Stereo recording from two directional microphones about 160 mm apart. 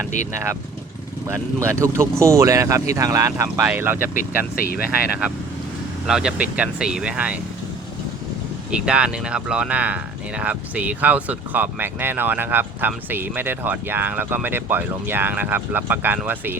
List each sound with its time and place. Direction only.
1.5 s speech: 20° right (ahead or behind)
4.1 s speech: 60° left (ahead or behind)
4.8 s speech: 10° right (ahead or behind)
8.7 s speech: 5° right (ahead or behind)